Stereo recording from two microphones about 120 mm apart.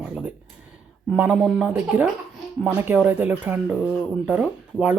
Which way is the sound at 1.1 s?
10° right (ahead or behind).